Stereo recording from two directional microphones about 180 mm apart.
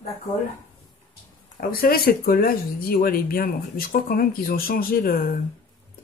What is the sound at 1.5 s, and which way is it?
Speech, 55° left (ahead or behind).